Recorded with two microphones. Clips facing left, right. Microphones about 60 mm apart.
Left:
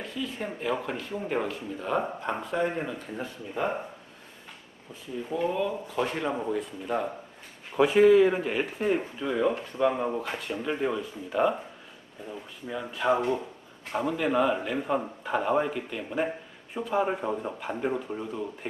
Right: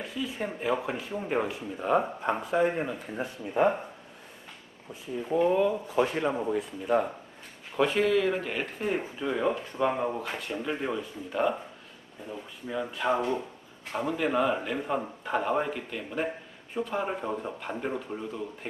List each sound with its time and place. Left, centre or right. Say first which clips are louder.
0.0 s speech: right 1 dB; centre
5.5 s speech: right 4 dB; centre
6.1 s a man's voice: right 1 dB; centre
7.8 s a man's voice: left 6 dB; centre